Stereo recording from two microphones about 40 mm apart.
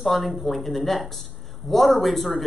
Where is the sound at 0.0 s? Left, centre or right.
Centre.